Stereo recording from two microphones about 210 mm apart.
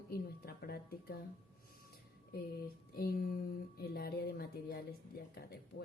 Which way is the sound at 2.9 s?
45° left (ahead or behind).